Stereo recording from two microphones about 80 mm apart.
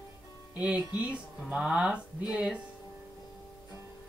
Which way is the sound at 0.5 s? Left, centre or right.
Centre.